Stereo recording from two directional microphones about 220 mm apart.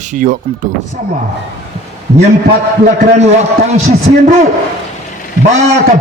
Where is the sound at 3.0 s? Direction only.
35° right (ahead or behind).